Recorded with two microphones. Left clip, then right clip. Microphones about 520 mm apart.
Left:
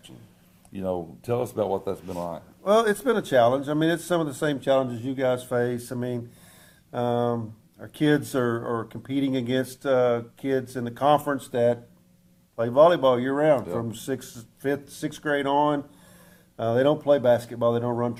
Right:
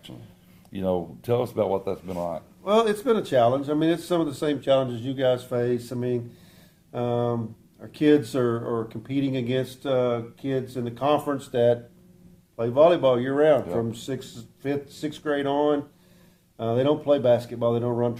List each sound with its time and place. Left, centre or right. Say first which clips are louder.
0.7 s speech: right 3 dB; centre
2.6 s speech: even; left